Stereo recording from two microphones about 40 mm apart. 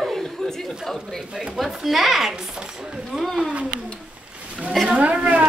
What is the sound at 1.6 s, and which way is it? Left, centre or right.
Speech, centre.